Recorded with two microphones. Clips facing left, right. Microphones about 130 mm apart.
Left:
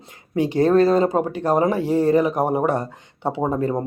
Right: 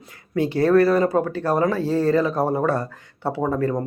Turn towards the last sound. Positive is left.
turn(degrees=20)  # may be behind; listen again after turning